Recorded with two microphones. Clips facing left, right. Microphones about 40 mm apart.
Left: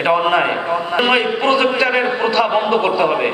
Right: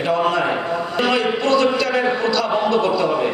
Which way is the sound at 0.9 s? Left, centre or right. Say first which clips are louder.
Left 3 dB; left.